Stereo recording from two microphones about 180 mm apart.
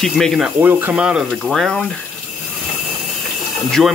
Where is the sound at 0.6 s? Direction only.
10° right (ahead or behind).